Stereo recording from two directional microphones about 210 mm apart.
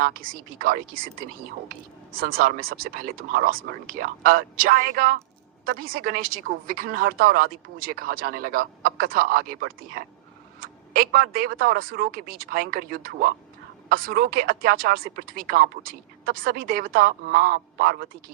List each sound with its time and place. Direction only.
0.6 s a woman's voice: 40° right (ahead or behind)